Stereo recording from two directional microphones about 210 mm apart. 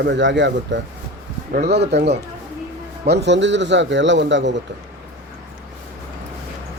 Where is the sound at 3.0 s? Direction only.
55° right (ahead or behind).